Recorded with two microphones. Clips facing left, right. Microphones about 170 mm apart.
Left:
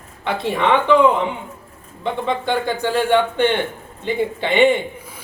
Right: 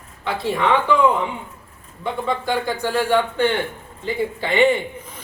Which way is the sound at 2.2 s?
20° left (ahead or behind).